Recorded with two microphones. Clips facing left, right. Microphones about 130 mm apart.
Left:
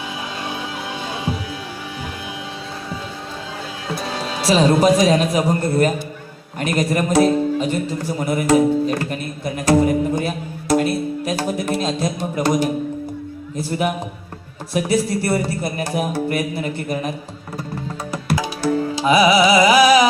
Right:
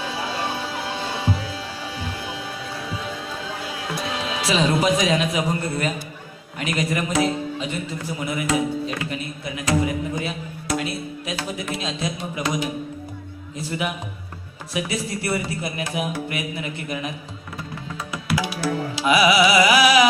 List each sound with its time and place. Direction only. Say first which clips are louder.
4.1 s a man's voice: left 6 dB; 35° left (ahead or behind)
18.1 s music: left 2 dB; 40° left (ahead or behind)
19.8 s speech: left 4 dB; 30° left (ahead or behind)